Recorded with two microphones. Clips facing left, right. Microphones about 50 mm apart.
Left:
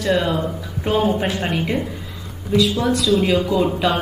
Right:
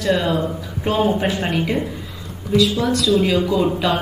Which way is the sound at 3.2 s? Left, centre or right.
Centre.